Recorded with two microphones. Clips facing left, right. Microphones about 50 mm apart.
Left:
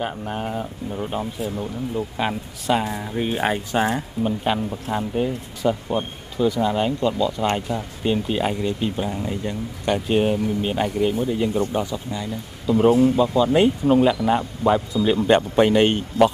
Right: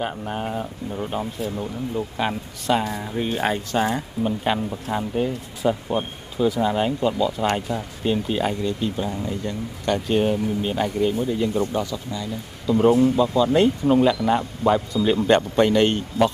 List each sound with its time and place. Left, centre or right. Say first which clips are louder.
0.0 s speech: even; centre
7.5 s speech: even; centre
8.6 s speech: left 1 dB; centre